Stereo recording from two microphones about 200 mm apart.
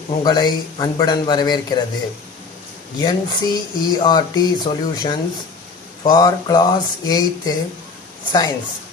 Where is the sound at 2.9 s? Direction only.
20° left (ahead or behind).